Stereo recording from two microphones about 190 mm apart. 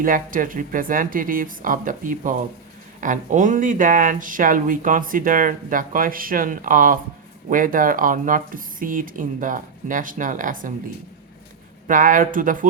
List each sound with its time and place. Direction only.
0.0 s speech: 45° right (ahead or behind)
11.9 s speech: 45° right (ahead or behind)